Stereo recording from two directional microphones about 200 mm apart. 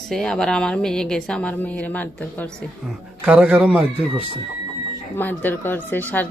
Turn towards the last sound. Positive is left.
turn(degrees=10)  # may be behind; listen again after turning